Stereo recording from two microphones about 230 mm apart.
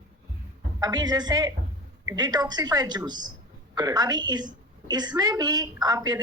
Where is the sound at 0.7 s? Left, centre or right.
Centre.